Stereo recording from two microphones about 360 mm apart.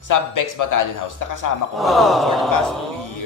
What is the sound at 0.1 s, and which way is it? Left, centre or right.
Speech, left.